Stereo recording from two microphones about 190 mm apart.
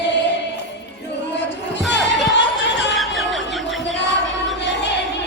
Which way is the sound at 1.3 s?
65° left (ahead or behind).